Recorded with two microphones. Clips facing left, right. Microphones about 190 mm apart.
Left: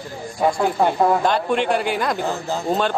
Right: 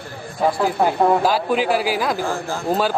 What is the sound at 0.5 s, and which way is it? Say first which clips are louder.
A man's voice: even; 5° right (ahead or behind).